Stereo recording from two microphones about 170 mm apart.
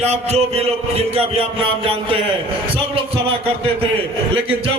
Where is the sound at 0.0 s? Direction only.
40° right (ahead or behind).